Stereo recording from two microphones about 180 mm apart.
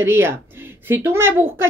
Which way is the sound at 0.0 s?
15° right (ahead or behind).